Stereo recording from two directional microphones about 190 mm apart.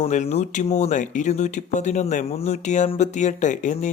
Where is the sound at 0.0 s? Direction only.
35° left (ahead or behind).